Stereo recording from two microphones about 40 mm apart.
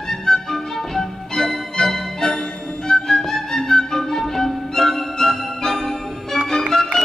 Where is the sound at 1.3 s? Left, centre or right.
Centre.